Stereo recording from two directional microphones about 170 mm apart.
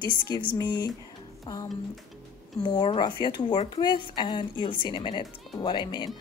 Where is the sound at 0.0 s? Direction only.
30° left (ahead or behind).